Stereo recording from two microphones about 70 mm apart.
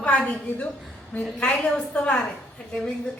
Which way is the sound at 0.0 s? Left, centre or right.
Centre.